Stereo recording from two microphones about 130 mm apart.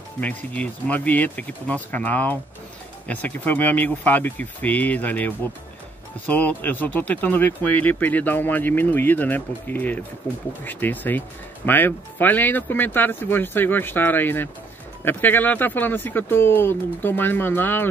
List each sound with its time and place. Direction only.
0.2 s speech: 10° left (ahead or behind)